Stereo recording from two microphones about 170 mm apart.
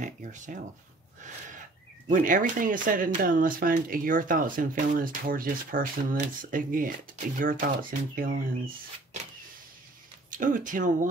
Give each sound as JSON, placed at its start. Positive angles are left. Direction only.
{"t": 0.0, "sound": "a sound", "side_deg": -45}
{"t": 2.0, "sound": "speech", "side_deg": -50}
{"t": 10.3, "sound": "speech", "side_deg": -50}